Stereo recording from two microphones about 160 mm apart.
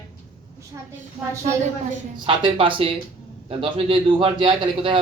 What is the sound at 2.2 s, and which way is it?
A man's voice, 35° right (ahead or behind).